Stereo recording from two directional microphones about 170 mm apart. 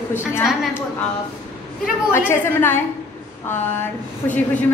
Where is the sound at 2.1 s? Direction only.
15° left (ahead or behind).